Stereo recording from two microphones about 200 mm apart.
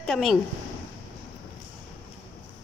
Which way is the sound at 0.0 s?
Centre (ahead or behind).